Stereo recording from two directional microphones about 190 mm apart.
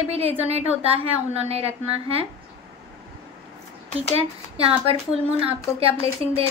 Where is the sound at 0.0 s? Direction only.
30° right (ahead or behind).